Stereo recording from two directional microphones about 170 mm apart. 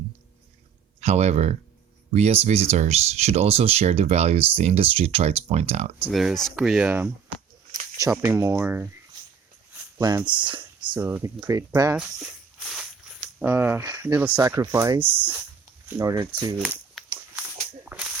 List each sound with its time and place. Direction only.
1.0 s speech: 40° right (ahead or behind)
6.1 s speech: centre (ahead or behind)
7.7 s a sound: 20° right (ahead or behind)
8.2 s speech: 15° right (ahead or behind)
10.0 s speech: 20° right (ahead or behind)
10.9 s speech: 10° right (ahead or behind)
13.4 s speech: 10° right (ahead or behind)
16.6 s a sound: centre (ahead or behind)
17.9 s whip: 15° right (ahead or behind)